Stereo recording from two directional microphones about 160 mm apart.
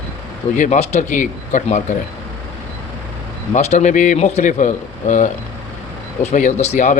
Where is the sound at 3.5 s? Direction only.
45° left (ahead or behind).